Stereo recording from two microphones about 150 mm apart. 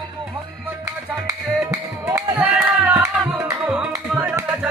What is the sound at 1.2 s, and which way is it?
Music, 20° right (ahead or behind).